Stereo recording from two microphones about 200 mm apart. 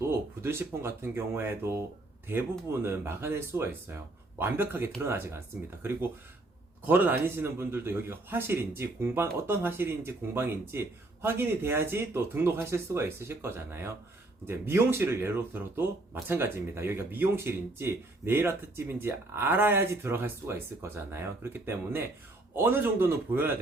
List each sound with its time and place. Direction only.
0.1 s a man's voice: 10° right (ahead or behind)